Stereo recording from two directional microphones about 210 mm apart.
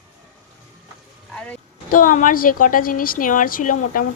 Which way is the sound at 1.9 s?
40° left (ahead or behind).